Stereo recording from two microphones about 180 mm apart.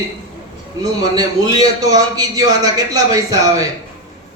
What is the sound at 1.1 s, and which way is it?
A man's voice, 20° right (ahead or behind).